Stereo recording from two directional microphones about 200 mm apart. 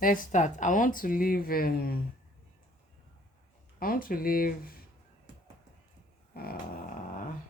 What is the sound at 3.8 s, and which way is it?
Speech, 45° left (ahead or behind).